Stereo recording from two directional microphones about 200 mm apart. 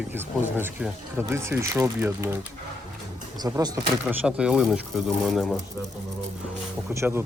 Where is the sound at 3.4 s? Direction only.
20° right (ahead or behind).